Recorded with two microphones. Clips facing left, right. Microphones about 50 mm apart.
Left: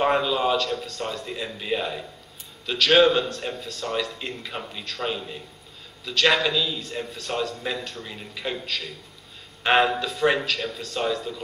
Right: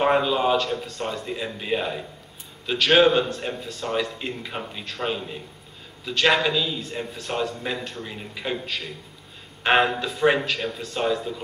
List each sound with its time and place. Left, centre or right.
0.0 s a man's voice: centre